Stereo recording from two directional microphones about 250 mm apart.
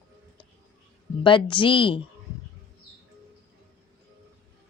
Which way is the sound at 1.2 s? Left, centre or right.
Centre.